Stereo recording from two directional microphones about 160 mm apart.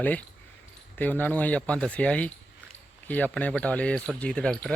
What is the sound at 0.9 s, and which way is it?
Speech, 10° left (ahead or behind).